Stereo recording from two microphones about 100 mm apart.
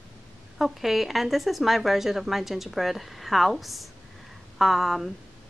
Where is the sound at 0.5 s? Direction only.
Centre (ahead or behind).